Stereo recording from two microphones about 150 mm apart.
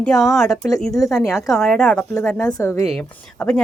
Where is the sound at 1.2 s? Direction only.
20° left (ahead or behind).